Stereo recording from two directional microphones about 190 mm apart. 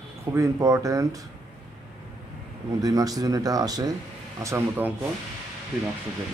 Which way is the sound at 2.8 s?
20° right (ahead or behind).